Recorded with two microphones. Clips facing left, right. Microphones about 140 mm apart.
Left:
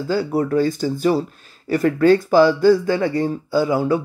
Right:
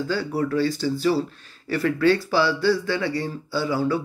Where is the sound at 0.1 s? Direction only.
40° left (ahead or behind).